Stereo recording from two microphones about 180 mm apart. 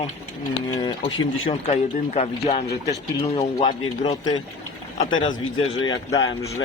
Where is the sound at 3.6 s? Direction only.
25° left (ahead or behind).